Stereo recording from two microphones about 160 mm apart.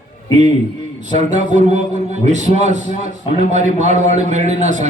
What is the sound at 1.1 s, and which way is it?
A man's voice, 50° right (ahead or behind).